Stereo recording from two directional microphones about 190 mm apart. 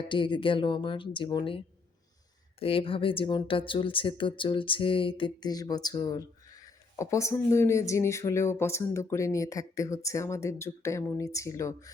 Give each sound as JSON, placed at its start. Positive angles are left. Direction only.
{"t": 0.0, "sound": "speech", "side_deg": 25}